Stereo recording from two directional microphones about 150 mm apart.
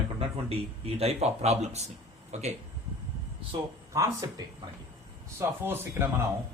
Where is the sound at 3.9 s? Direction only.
20° right (ahead or behind).